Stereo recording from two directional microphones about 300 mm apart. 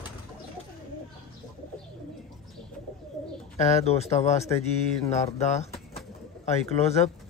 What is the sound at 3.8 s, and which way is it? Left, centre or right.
Speech, left.